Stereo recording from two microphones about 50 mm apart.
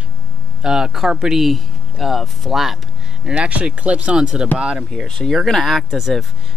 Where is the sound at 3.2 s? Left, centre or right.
Right.